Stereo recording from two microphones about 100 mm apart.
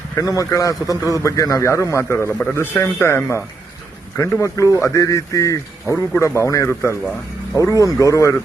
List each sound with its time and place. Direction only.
0.2 s a man's voice: 35° left (ahead or behind)